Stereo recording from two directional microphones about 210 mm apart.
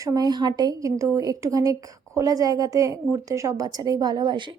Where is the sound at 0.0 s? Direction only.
15° right (ahead or behind).